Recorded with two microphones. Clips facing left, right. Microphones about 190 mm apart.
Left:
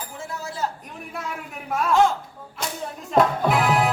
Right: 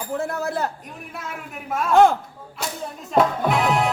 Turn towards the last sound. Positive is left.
turn(degrees=0)  # may be behind; listen again after turning